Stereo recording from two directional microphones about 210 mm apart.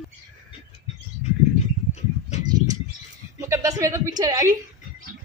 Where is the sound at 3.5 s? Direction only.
15° right (ahead or behind).